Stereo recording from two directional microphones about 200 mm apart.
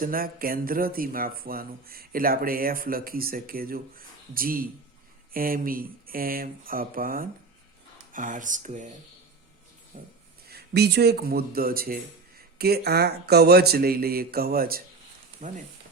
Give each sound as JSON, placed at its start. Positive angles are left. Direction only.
{"t": 0.0, "sound": "speech", "side_deg": -45}
{"t": 9.9, "sound": "speech", "side_deg": -45}
{"t": 10.5, "sound": "speech", "side_deg": -55}
{"t": 15.4, "sound": "frying", "side_deg": -35}